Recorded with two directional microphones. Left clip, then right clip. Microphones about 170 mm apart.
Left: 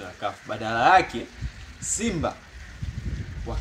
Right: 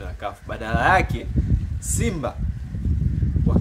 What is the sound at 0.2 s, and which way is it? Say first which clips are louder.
Speech: even; 10° right (ahead or behind).